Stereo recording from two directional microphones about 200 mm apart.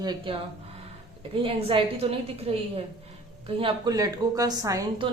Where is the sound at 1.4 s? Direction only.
25° right (ahead or behind).